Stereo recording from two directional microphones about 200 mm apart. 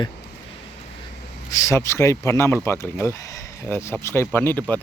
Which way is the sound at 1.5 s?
15° left (ahead or behind).